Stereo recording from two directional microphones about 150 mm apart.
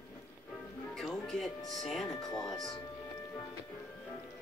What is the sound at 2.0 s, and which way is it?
Speech, 25° left (ahead or behind).